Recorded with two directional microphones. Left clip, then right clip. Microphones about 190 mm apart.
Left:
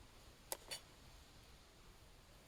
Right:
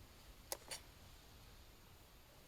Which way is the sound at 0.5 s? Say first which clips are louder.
Right 1 dB; centre (ahead or behind).